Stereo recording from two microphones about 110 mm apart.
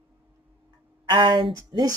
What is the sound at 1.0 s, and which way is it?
Speech, 45° right (ahead or behind).